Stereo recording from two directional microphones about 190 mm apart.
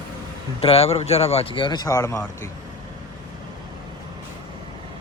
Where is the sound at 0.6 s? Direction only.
30° left (ahead or behind); by 2.5 s 15° left (ahead or behind).